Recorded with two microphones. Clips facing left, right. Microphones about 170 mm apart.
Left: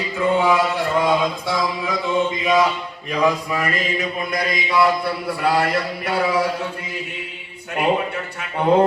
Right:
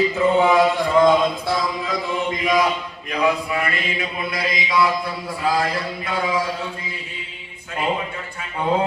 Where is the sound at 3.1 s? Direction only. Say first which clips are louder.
Left 1 dB; 40° left (ahead or behind).